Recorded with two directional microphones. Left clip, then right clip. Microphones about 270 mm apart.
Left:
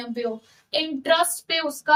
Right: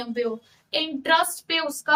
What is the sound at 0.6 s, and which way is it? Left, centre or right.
Speech, centre.